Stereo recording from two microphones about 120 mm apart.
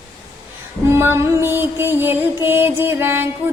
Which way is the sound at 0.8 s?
20° right (ahead or behind).